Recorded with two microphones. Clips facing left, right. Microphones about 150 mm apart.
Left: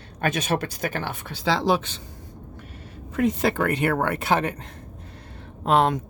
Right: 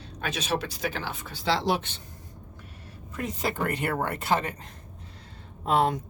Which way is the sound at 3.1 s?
70° left (ahead or behind).